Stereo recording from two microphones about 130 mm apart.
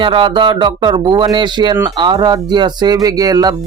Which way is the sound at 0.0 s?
40° right (ahead or behind).